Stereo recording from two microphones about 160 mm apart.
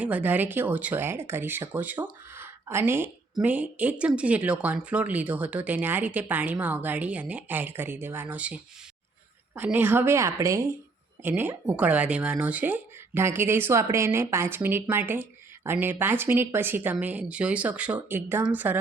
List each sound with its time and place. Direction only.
0.0 s speech: 10° right (ahead or behind)
2.3 s a sound: 15° right (ahead or behind)
3.4 s speech: 10° right (ahead or behind)
9.6 s speech: 10° right (ahead or behind)